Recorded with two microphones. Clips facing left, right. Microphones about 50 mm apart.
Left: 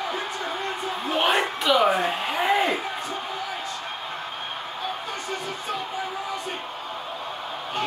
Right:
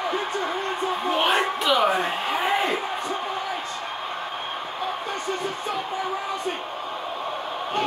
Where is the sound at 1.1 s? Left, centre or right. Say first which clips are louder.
Left 1 dB; centre.